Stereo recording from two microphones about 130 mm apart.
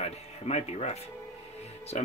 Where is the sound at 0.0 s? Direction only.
55° left (ahead or behind).